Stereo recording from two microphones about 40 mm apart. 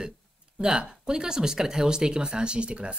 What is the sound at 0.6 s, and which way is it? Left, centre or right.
Speech, right.